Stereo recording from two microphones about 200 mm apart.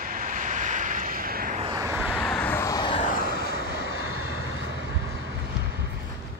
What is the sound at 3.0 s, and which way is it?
Vehicle, 45° left (ahead or behind).